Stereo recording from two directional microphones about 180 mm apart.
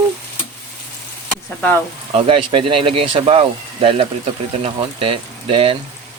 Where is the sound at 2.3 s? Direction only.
30° right (ahead or behind).